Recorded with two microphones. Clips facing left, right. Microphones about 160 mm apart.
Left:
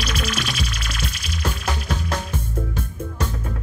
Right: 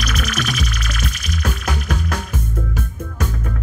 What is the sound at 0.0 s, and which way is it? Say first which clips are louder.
Music: right 2 dB; 30° left (ahead or behind).